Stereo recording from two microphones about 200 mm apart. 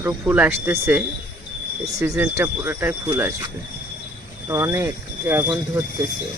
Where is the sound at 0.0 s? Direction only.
10° right (ahead or behind).